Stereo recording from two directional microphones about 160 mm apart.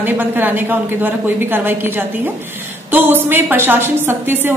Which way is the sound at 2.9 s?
15° right (ahead or behind).